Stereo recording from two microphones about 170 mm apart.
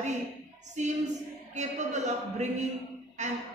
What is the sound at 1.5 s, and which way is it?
A woman's voice, 45° right (ahead or behind).